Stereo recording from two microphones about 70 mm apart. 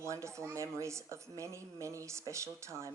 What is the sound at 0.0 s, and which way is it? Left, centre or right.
A woman's voice, right.